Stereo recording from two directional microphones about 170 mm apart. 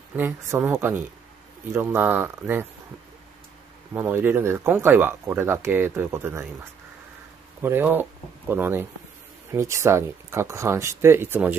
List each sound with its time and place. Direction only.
0.1 s speech: 10° right (ahead or behind)
3.9 s speech: 10° right (ahead or behind)
7.6 s speech: 10° right (ahead or behind)